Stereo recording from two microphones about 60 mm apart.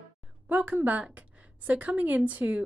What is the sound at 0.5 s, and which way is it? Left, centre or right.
A woman's voice, right.